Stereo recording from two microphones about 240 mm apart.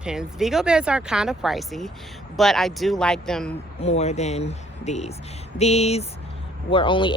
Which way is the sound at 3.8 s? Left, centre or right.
Left.